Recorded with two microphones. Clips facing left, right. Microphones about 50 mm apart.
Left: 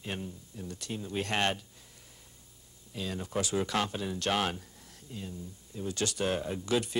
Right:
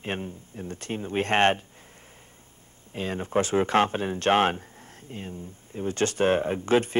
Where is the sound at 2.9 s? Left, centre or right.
Right.